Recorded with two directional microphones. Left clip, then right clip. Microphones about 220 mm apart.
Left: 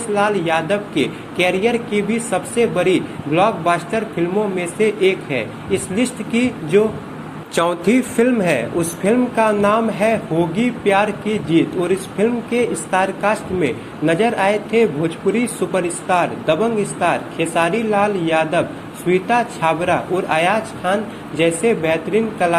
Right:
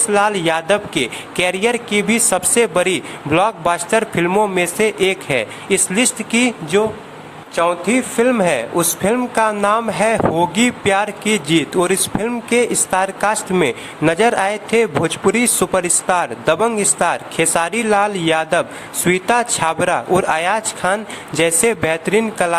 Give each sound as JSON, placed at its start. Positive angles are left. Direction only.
{"t": 0.1, "sound": "speech", "side_deg": -35}
{"t": 7.7, "sound": "speech", "side_deg": 0}
{"t": 8.1, "sound": "speech", "side_deg": -20}